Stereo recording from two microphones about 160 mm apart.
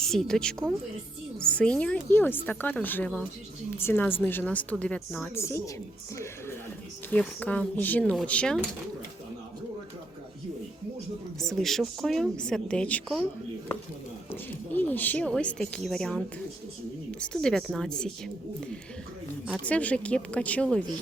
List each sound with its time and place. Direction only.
0.1 s a woman's voice: 5° left (ahead or behind)
5.3 s speech: 15° left (ahead or behind)
7.1 s speech: 10° left (ahead or behind)
11.3 s a woman's voice: centre (ahead or behind)
14.3 s a woman's voice: 10° left (ahead or behind)
19.6 s speech: 10° left (ahead or behind)